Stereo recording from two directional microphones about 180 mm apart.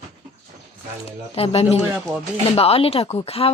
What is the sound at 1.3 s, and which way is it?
Speech, 35° left (ahead or behind).